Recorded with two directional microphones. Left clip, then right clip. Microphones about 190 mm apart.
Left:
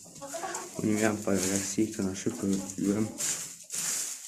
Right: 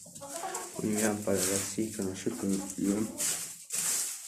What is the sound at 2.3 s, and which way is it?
Speech, 20° left (ahead or behind).